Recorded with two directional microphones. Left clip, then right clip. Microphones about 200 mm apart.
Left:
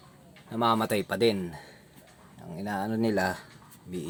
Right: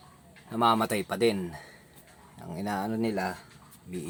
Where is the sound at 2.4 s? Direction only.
15° right (ahead or behind).